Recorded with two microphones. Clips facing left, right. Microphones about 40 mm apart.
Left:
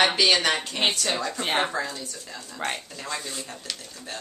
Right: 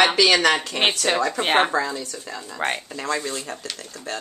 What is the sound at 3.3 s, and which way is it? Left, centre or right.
Speech, right.